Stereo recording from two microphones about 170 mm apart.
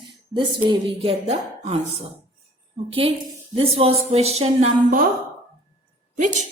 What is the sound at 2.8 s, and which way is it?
Speech, 30° right (ahead or behind).